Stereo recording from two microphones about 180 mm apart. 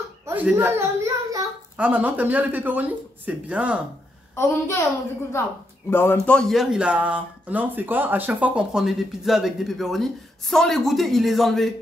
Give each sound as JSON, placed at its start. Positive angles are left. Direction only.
{"t": 0.2, "sound": "a sound", "side_deg": -10}
{"t": 1.8, "sound": "speech", "side_deg": -10}
{"t": 4.4, "sound": "a child's voice", "side_deg": 15}
{"t": 5.9, "sound": "speech", "side_deg": 10}